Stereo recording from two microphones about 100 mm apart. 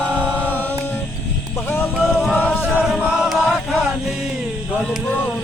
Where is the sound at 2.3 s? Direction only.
20° left (ahead or behind).